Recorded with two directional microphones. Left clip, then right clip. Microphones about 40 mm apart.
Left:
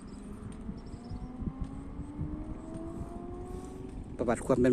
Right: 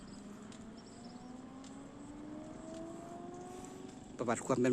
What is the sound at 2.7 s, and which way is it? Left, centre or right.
Vehicle, centre.